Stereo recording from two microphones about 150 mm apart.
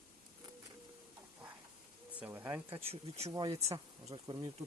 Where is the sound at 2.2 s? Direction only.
15° right (ahead or behind).